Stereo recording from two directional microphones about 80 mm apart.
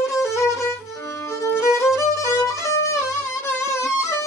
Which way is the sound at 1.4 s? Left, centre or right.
Left.